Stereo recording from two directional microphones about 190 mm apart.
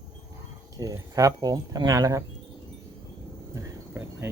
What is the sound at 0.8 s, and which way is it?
Speech, 20° right (ahead or behind).